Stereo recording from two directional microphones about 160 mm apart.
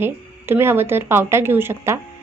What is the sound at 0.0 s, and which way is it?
A woman's voice, 15° right (ahead or behind).